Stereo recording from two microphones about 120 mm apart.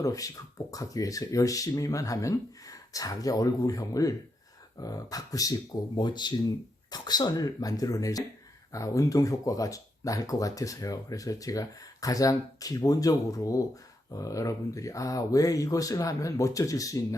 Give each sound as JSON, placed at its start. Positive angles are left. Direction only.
{"t": 0.0, "sound": "speech", "side_deg": 30}